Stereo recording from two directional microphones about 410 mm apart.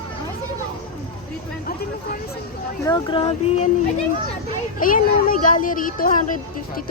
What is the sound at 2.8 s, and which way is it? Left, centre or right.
Speech, centre.